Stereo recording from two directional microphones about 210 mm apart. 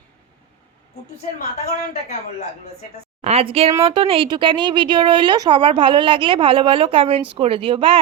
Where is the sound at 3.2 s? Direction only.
30° right (ahead or behind).